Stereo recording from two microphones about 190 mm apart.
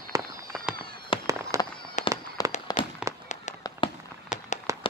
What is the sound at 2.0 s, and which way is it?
Fireworks, 40° left (ahead or behind).